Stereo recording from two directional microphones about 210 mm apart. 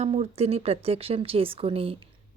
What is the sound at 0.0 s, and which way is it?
Speech, 30° right (ahead or behind).